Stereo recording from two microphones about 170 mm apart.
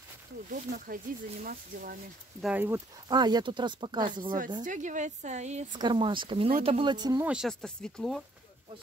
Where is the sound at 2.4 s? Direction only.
10° right (ahead or behind); by 4.3 s 25° right (ahead or behind).